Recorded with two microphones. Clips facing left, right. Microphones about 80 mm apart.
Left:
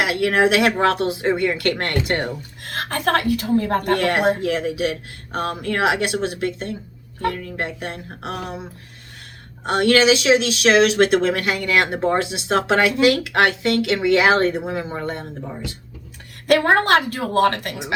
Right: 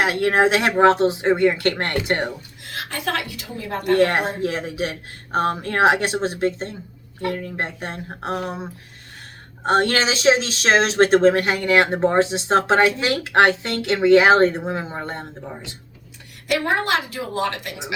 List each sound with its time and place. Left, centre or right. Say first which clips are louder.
0.0 s speech: even; right
2.6 s a woman's voice: left 5 dB; left
3.9 s speech: right 2 dB; right
9.6 s speech: left 3 dB; right
16.5 s a woman's voice: left 5 dB; left